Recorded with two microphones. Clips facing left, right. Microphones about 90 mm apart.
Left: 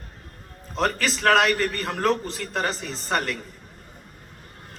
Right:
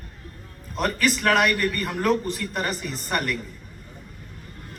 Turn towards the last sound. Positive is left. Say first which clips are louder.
# left 1 dB
turn(degrees=25)  # may be behind; listen again after turning